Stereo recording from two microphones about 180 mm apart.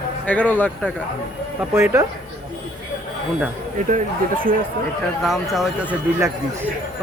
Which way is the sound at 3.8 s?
45° right (ahead or behind).